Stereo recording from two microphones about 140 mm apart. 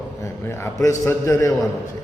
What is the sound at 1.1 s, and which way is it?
Speech, 20° left (ahead or behind).